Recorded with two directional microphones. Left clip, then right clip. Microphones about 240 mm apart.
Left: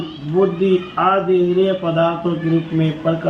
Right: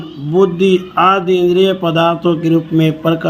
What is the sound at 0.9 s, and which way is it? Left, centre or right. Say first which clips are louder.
A man's voice: right 4 dB; right.